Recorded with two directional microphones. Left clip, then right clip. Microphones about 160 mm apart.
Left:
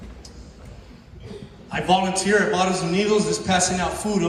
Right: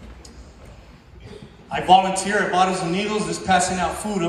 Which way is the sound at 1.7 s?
35° right (ahead or behind).